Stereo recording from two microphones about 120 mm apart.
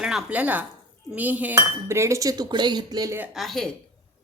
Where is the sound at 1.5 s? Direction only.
25° right (ahead or behind).